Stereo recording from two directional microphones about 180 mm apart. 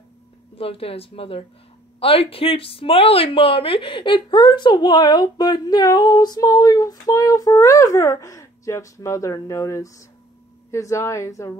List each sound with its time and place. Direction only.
0.6 s a woman's voice: 30° left (ahead or behind); by 11.5 s 15° left (ahead or behind)